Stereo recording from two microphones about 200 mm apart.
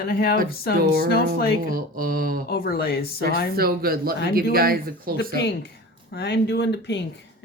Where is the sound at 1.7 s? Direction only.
45° right (ahead or behind).